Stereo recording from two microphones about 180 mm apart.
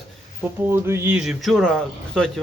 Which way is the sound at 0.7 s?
15° right (ahead or behind).